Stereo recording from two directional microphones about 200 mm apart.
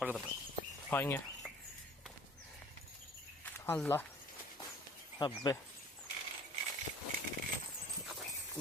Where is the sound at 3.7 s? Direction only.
10° left (ahead or behind).